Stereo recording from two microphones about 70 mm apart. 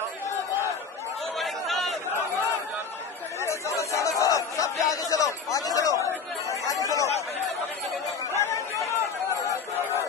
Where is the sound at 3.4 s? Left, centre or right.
Left.